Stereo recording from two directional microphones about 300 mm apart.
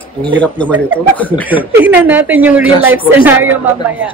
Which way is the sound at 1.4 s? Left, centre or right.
Centre.